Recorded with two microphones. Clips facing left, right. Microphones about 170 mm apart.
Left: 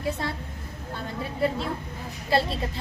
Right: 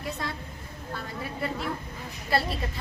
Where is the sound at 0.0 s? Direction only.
30° left (ahead or behind).